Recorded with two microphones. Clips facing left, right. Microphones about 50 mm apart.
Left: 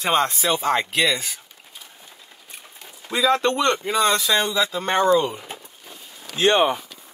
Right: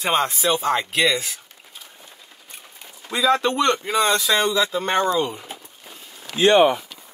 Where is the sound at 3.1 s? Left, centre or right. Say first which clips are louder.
Even; centre.